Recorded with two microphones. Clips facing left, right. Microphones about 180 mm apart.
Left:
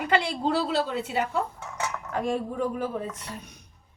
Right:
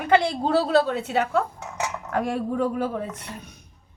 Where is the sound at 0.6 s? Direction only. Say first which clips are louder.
Right 9 dB; 45° right (ahead or behind).